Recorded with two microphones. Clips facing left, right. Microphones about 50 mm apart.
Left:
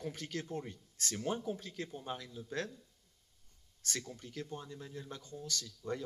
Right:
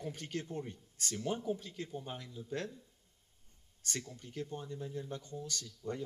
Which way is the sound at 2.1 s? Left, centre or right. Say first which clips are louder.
Right 1 dB; left.